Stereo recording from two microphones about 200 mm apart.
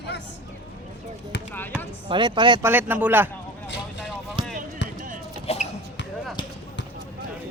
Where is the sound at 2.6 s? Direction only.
10° right (ahead or behind).